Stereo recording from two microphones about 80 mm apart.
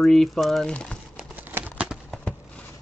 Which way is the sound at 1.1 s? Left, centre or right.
Right.